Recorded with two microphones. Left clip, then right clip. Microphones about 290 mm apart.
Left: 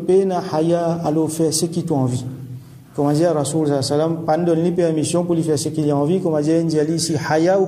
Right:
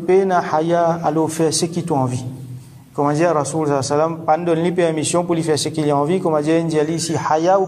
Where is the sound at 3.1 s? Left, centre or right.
Centre.